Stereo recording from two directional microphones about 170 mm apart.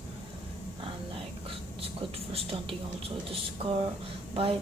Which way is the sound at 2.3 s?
30° right (ahead or behind).